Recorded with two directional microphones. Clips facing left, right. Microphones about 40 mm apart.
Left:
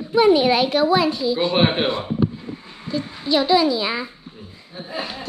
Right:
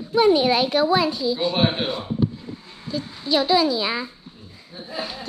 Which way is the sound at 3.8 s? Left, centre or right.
Left.